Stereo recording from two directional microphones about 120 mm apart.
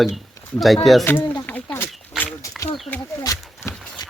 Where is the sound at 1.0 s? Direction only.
20° left (ahead or behind).